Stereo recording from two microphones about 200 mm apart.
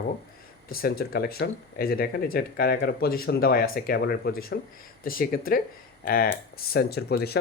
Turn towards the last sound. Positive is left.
turn(degrees=55)  # may be behind; listen again after turning